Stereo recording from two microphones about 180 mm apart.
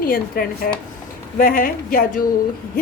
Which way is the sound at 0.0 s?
55° left (ahead or behind).